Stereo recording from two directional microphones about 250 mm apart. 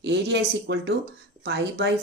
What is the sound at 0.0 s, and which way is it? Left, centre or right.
Speech, right.